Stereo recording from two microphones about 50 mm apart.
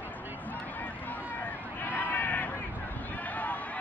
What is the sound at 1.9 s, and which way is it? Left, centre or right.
Sheep, left.